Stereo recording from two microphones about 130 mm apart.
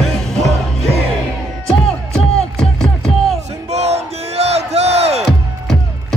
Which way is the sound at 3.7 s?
55° right (ahead or behind).